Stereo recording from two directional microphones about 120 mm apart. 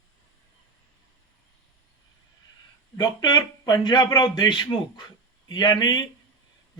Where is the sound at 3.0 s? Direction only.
35° left (ahead or behind).